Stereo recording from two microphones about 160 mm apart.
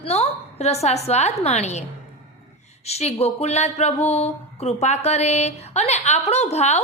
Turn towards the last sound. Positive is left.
turn(degrees=45)  # may be behind; listen again after turning